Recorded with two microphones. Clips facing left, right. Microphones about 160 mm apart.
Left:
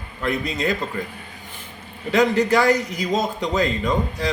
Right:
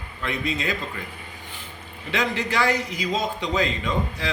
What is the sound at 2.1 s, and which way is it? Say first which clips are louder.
Speech: left 8 dB; 40° left (ahead or behind).